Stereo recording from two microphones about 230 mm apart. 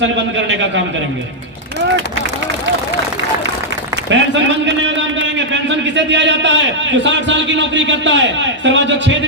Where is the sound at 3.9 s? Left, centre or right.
Right.